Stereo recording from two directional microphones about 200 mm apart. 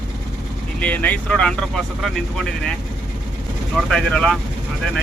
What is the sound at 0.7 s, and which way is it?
Speech, 5° left (ahead or behind).